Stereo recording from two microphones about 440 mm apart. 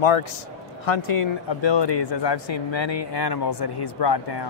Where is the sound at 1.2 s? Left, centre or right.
Left.